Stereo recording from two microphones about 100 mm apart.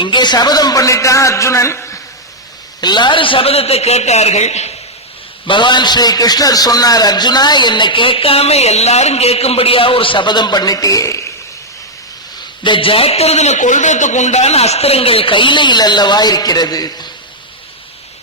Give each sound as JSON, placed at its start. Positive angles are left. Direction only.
{"t": 0.0, "sound": "a man's voice", "side_deg": 50}
{"t": 2.8, "sound": "a man's voice", "side_deg": 50}
{"t": 5.5, "sound": "a man's voice", "side_deg": 50}
{"t": 12.6, "sound": "a man's voice", "side_deg": 60}